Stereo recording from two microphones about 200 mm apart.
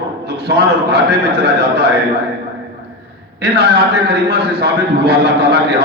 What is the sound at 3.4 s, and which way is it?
A man's voice, 55° right (ahead or behind).